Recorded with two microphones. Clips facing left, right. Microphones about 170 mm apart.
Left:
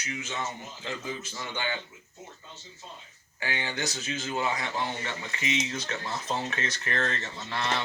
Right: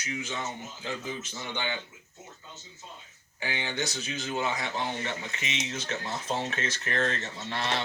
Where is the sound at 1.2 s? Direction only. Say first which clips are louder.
Even; 20° right (ahead or behind).